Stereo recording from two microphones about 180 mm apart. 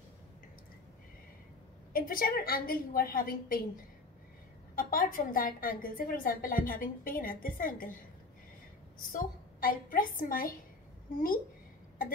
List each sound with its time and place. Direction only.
1.9 s a woman's voice: 55° left (ahead or behind)
4.7 s a woman's voice: 50° left (ahead or behind)
9.1 s a woman's voice: 50° left (ahead or behind)